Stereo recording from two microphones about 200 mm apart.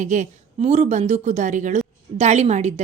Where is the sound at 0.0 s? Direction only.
40° right (ahead or behind).